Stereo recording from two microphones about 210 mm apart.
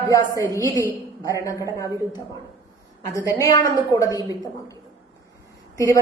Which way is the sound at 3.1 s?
15° left (ahead or behind).